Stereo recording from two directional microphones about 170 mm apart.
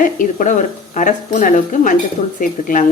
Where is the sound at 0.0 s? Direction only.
50° left (ahead or behind).